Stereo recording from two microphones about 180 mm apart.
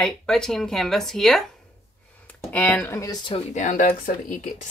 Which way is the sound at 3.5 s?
45° left (ahead or behind).